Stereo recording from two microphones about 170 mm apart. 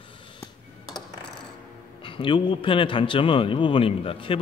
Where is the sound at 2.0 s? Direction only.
30° left (ahead or behind).